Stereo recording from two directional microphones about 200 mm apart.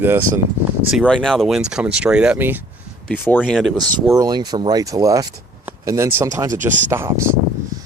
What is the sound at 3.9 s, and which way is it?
Speech, 15° right (ahead or behind).